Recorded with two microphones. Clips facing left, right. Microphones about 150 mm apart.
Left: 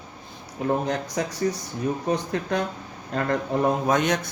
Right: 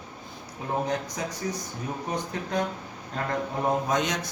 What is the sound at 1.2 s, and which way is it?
Speech, 80° left.